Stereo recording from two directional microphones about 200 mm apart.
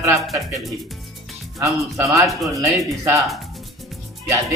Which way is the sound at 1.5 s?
15° right (ahead or behind).